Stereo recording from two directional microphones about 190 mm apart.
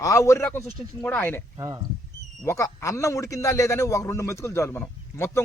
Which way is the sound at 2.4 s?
15° left (ahead or behind).